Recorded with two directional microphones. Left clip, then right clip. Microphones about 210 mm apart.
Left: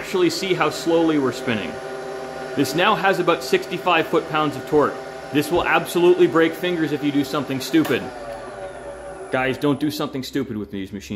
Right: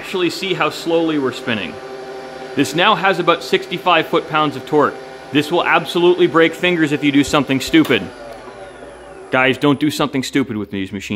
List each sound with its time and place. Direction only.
0.1 s a man's voice: 10° right (ahead or behind); by 8.0 s 30° right (ahead or behind)
9.3 s speech: 30° right (ahead or behind)